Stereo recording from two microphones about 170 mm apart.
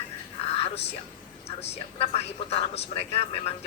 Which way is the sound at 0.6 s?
35° left (ahead or behind).